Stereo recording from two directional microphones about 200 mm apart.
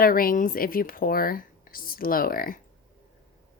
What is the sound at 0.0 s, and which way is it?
Speech, 45° left (ahead or behind).